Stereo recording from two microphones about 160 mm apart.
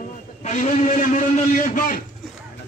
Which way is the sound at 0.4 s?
50° left (ahead or behind).